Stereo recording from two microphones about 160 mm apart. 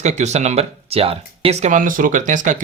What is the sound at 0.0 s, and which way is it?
Speech, 45° right (ahead or behind).